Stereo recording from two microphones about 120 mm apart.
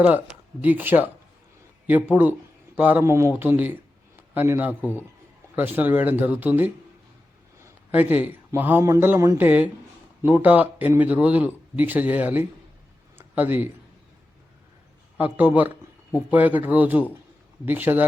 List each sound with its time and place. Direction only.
0.6 s speech: 15° right (ahead or behind)
2.7 s a man's voice: 15° right (ahead or behind)
13.1 s a sound: 15° right (ahead or behind)
15.2 s speech: 10° right (ahead or behind)